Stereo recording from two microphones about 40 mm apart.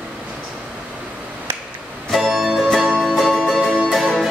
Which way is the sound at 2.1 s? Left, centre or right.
Centre.